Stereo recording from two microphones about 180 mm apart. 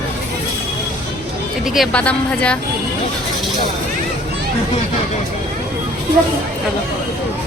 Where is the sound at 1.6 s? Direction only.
Centre (ahead or behind).